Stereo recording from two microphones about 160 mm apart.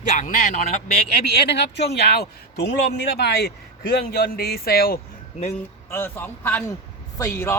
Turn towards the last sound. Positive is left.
turn(degrees=15)  # may be behind; listen again after turning